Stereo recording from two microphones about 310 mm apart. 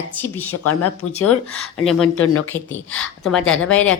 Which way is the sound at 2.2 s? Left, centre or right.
Left.